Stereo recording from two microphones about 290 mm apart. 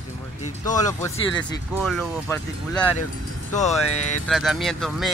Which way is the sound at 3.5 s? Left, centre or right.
Left.